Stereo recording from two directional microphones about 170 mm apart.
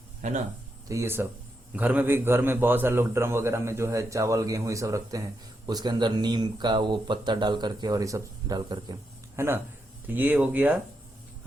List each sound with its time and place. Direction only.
0.2 s speech: 45° right (ahead or behind)
0.9 s a man's voice: 15° right (ahead or behind)